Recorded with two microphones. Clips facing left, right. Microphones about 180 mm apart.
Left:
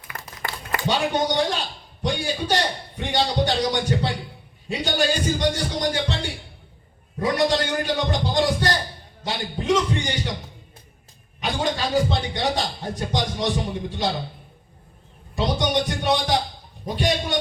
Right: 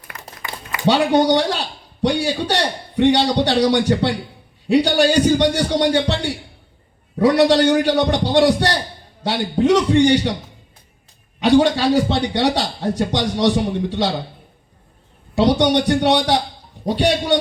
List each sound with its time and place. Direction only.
0.1 s a sound: 50° left (ahead or behind)
0.9 s a man's voice: 75° right (ahead or behind)
11.3 s a man's voice: 80° right
15.4 s a man's voice: 75° right (ahead or behind)